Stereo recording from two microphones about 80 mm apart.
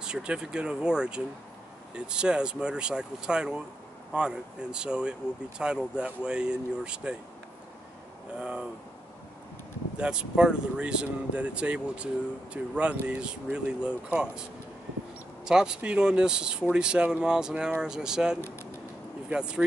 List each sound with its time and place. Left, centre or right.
0.0 s speech: centre
8.4 s speech: centre
9.9 s speech: centre
15.4 s speech: centre